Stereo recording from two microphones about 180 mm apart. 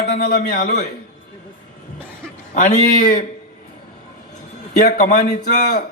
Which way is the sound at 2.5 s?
45° left (ahead or behind).